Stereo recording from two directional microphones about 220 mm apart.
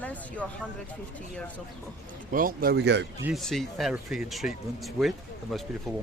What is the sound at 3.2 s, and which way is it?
Speech, centre (ahead or behind).